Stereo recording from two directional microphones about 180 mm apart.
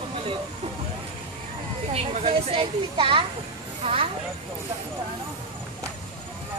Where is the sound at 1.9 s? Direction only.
35° right (ahead or behind).